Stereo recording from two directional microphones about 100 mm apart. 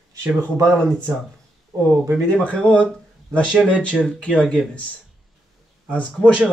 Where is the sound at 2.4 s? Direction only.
15° left (ahead or behind).